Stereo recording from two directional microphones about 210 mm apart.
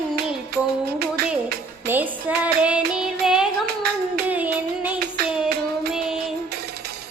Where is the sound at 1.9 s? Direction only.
10° right (ahead or behind).